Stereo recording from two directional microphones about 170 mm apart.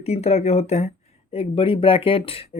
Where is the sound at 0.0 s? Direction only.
40° left (ahead or behind).